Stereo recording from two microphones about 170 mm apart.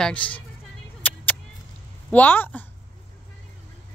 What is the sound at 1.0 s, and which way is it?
Vehicle, 10° left (ahead or behind).